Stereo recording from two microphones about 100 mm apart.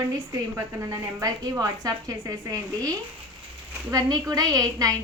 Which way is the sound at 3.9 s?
40° right (ahead or behind).